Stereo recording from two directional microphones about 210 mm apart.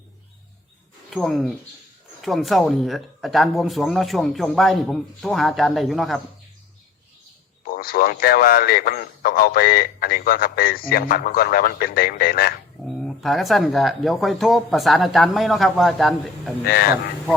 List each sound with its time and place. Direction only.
1.1 s speech: centre (ahead or behind)
7.6 s a man's voice: 45° left (ahead or behind)
13.0 s speech: centre (ahead or behind)
16.6 s a man's voice: 45° left (ahead or behind)